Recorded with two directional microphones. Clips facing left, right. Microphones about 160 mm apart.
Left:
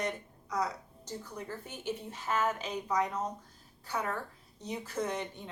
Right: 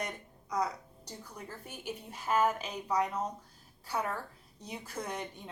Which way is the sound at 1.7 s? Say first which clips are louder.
Left 3 dB; 10° right (ahead or behind).